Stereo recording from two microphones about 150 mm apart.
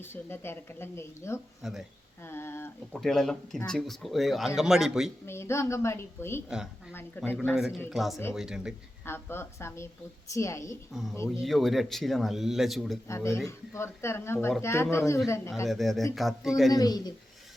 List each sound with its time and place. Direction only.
0.0 s speech: 15° left (ahead or behind)
1.6 s speech: centre (ahead or behind)
2.2 s a sound: 15° left (ahead or behind)
2.9 s speech: 5° left (ahead or behind)
5.2 s speech: 15° left (ahead or behind)
7.5 s speech: 5° right (ahead or behind)
9.0 s a woman's voice: 15° left (ahead or behind)
11.3 s speech: centre (ahead or behind)
13.1 s a woman's voice: 20° left (ahead or behind)
15.6 s speech: centre (ahead or behind)
16.7 s a woman's voice: 25° left (ahead or behind)